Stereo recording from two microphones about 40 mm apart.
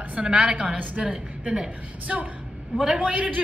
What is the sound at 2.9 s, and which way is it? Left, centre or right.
Speech, right.